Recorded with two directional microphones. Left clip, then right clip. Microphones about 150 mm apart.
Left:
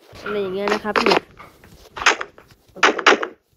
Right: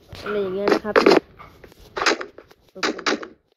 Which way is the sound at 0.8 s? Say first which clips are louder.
Right 2 dB; 20° left (ahead or behind).